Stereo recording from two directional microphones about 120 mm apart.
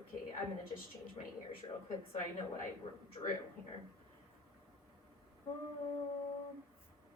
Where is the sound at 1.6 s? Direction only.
40° left (ahead or behind).